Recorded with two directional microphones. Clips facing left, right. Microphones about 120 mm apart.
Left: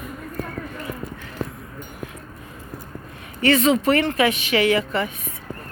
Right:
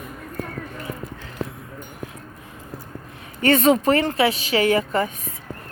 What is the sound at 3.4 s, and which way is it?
Speech, 45° right (ahead or behind).